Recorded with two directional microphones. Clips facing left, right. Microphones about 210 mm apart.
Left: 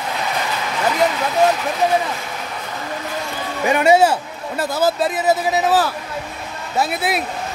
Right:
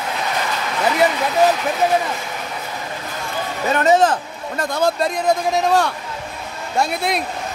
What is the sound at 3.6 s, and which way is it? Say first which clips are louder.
A man's voice: left 2 dB; 10° left (ahead or behind).